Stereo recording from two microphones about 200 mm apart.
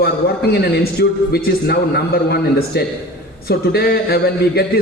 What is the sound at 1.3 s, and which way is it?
A man's voice, 55° left (ahead or behind).